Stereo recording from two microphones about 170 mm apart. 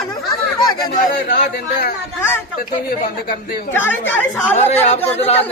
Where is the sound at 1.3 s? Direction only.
65° left (ahead or behind).